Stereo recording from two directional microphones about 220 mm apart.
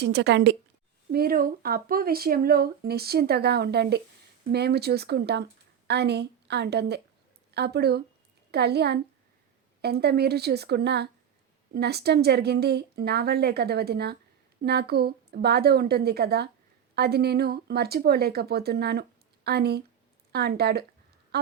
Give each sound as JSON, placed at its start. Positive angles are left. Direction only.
{"t": 0.0, "sound": "speech", "side_deg": -50}